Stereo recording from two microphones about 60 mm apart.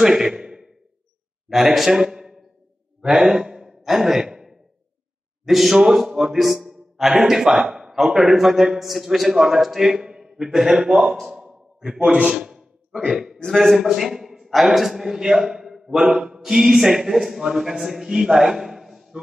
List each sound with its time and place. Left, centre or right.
0.0 s a sound: centre
1.5 s a man's voice: centre
3.0 s sigh: centre
5.4 s speech: centre
12.0 s a man's voice: right
12.3 s a sound: centre
13.5 s a man's voice: centre